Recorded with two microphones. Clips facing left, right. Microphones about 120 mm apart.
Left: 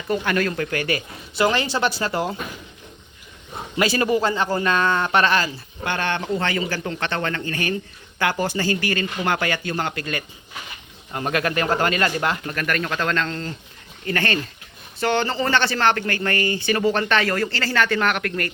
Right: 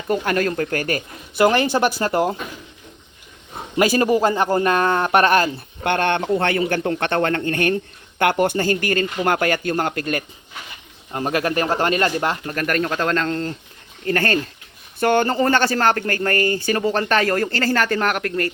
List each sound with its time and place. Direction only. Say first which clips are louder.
0.3 s a man's voice: right 2 dB; 40° right (ahead or behind)
3.8 s a man's voice: right 3 dB; 40° right (ahead or behind)
11.1 s a man's voice: right 2 dB; 30° right (ahead or behind)